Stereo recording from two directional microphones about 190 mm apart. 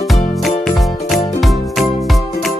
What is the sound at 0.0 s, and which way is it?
Music, centre (ahead or behind).